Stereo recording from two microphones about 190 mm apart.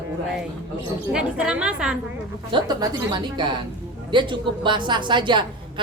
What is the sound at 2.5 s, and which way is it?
A woman's voice, 20° right (ahead or behind).